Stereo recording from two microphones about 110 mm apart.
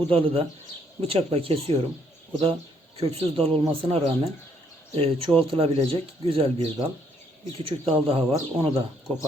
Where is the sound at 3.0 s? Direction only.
60° right (ahead or behind).